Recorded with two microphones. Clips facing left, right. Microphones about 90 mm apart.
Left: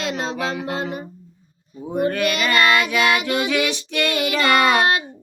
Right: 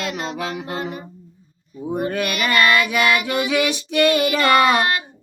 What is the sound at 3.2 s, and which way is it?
Child singing, 20° right (ahead or behind).